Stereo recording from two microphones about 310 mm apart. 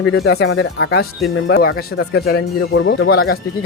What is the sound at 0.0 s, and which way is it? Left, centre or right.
Speech, left.